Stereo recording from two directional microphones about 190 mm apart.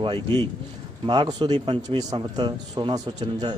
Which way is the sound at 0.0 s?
25° right (ahead or behind).